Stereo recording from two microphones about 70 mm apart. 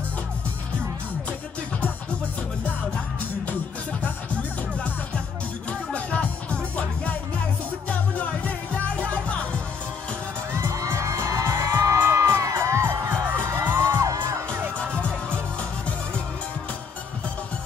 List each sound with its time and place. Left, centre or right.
5.9 s music: centre
10.5 s music: right
14.8 s music: centre